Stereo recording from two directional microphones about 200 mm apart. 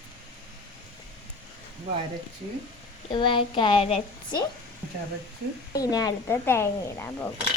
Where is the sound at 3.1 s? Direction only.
25° left (ahead or behind).